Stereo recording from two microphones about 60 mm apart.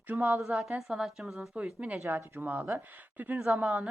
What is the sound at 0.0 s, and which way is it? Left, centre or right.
Speech, right.